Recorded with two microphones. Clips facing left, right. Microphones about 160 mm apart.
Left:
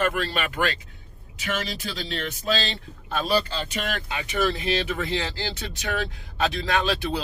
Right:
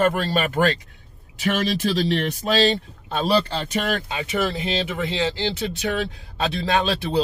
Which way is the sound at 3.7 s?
40° right (ahead or behind).